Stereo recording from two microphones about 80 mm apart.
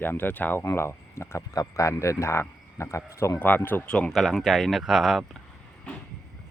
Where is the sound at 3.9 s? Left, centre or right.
Centre.